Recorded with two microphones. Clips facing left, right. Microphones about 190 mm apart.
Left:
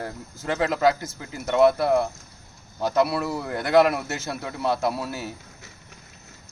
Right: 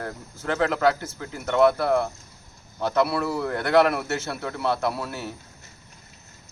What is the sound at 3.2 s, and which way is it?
Speech, 20° left (ahead or behind).